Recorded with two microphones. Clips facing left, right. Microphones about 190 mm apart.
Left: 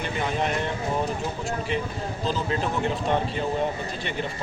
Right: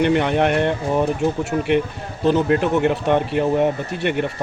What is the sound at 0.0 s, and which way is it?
Speech, 70° right (ahead or behind).